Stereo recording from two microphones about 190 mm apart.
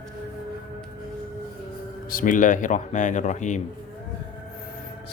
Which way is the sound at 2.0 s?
45° left (ahead or behind).